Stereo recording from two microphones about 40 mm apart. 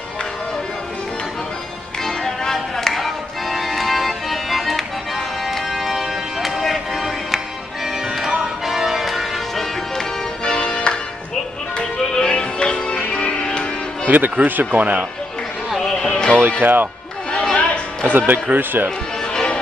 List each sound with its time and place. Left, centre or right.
2.0 s music: centre
8.6 s change ringing: centre
10.4 s music: left
14.0 s speech: right
15.8 s music: centre
16.3 s speech: right
17.6 s music: left
18.1 s speech: right
19.2 s music: left